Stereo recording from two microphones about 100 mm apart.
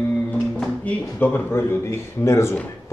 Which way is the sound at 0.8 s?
20° left (ahead or behind).